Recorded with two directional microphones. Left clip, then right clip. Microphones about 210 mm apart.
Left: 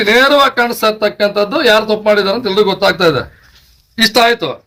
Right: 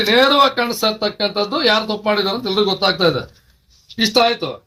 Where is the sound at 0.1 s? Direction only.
10° left (ahead or behind).